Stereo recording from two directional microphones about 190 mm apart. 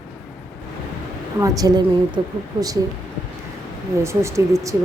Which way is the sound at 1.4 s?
20° right (ahead or behind).